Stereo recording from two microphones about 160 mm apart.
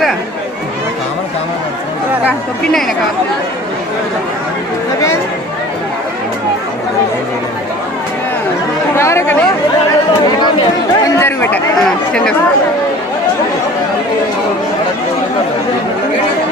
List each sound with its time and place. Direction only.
8.9 s chatter: 15° left (ahead or behind)
11.1 s chatter: 15° left (ahead or behind)
11.8 s speech: 5° left (ahead or behind)